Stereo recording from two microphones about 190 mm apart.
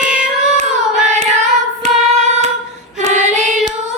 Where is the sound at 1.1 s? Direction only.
35° right (ahead or behind).